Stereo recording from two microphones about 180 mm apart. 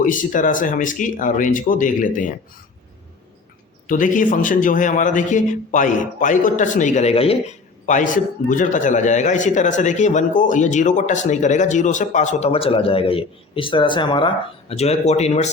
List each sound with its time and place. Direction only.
0.0 s a man's voice: 45° left (ahead or behind)
3.8 s a man's voice: 50° left (ahead or behind)